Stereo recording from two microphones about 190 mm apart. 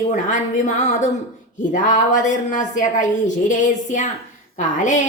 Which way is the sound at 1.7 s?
40° left (ahead or behind).